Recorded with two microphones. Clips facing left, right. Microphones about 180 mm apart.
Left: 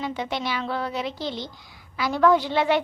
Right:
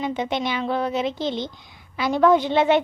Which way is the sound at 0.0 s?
20° right (ahead or behind).